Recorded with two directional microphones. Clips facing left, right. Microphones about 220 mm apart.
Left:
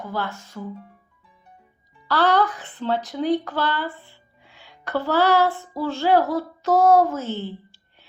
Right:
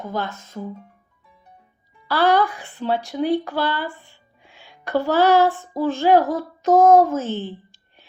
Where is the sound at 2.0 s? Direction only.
10° right (ahead or behind).